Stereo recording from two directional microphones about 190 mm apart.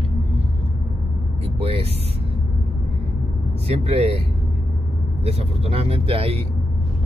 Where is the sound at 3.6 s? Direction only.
30° right (ahead or behind).